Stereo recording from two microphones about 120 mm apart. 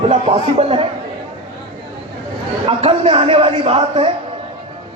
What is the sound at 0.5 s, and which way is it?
Speech, 55° right (ahead or behind).